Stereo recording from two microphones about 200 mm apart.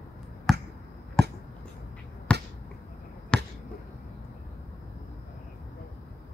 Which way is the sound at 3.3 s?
5° left (ahead or behind).